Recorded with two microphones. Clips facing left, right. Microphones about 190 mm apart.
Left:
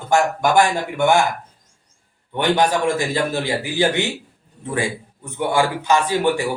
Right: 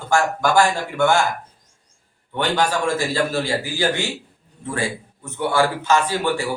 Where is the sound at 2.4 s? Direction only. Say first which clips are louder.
Left 3 dB; 20° left (ahead or behind).